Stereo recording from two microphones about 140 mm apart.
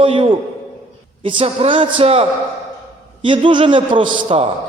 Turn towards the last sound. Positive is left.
turn(degrees=-35)  # may be behind; listen again after turning